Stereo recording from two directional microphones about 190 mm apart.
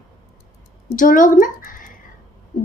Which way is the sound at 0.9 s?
45° left (ahead or behind).